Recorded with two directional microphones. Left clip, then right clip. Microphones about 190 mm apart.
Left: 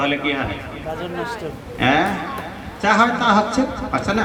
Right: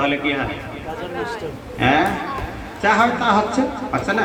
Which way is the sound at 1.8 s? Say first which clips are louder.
Right 1 dB; 40° left (ahead or behind).